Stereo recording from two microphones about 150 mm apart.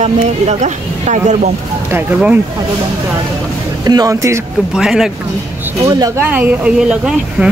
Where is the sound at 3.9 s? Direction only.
25° right (ahead or behind).